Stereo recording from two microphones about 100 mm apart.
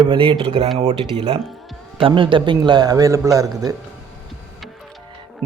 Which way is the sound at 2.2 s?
55° right (ahead or behind).